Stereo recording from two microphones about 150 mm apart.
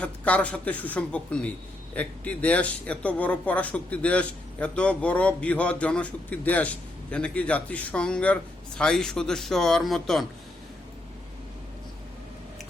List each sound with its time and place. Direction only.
0.0 s a man's voice: 10° left (ahead or behind)